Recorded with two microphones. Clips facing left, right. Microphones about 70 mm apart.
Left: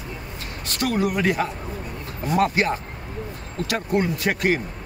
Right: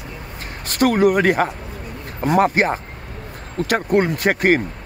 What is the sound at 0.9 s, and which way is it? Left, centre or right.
Speech, right.